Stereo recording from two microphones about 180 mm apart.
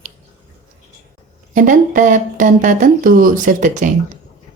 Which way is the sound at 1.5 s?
45° right (ahead or behind).